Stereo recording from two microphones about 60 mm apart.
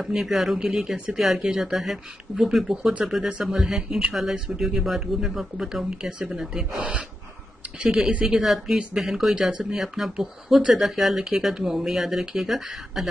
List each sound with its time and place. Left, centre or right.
0.1 s speech: centre
6.8 s speech: right
8.4 s speech: centre